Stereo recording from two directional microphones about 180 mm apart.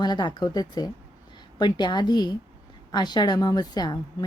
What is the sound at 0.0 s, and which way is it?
Speech, 25° left (ahead or behind).